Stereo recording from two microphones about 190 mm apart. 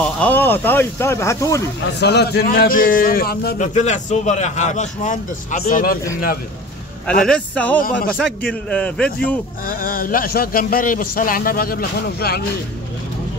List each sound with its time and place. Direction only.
0.0 s speech: 10° left (ahead or behind)
2.0 s speech: 60° left (ahead or behind)
7.1 s speech: 5° left (ahead or behind)
9.7 s speech: 50° left (ahead or behind)